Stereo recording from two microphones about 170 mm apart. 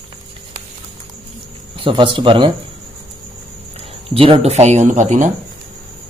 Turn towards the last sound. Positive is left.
turn(degrees=-45)  # may be behind; listen again after turning